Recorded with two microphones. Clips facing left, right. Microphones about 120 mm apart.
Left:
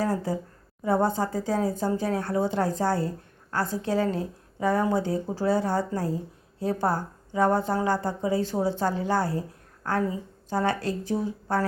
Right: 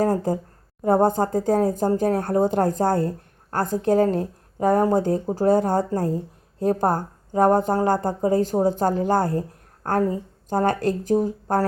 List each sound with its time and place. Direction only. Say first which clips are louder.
0.0 s a woman's voice: right 6 dB; 45° right (ahead or behind)